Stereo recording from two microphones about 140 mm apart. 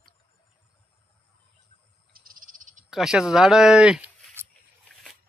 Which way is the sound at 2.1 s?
90° right.